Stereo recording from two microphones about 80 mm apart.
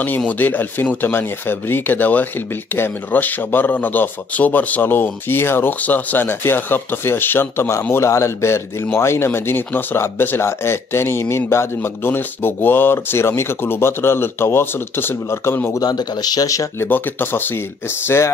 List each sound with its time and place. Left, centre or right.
0.3 s a man's voice: left
15.7 s speech: left
16.8 s speech: left